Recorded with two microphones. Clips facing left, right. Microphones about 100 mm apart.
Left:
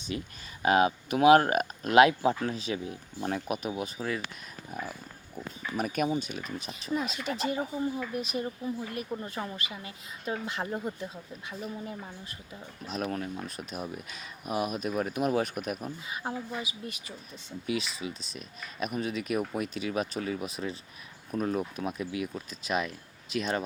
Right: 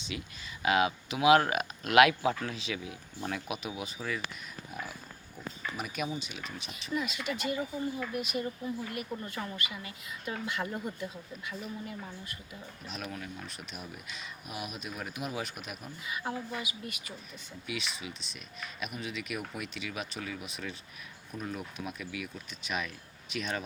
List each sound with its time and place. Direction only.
0.1 s speech: 35° left (ahead or behind)
5.7 s speech: 50° left (ahead or behind); by 12.4 s 30° left (ahead or behind)
12.9 s speech: 45° left (ahead or behind)
16.0 s speech: 30° left (ahead or behind)